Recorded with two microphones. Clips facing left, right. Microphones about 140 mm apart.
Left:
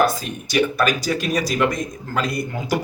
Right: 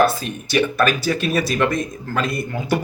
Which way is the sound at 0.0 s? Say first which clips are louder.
Right 2 dB; 15° left (ahead or behind).